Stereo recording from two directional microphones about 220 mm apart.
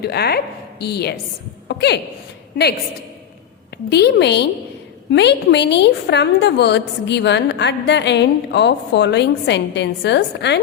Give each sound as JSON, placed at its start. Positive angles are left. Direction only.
{"t": 0.0, "sound": "a woman's voice", "side_deg": 45}
{"t": 1.6, "sound": "a sound", "side_deg": 50}
{"t": 3.8, "sound": "a woman's voice", "side_deg": 50}